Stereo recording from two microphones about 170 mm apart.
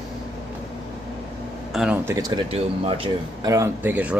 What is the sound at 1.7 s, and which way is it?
Speech, 5° right (ahead or behind).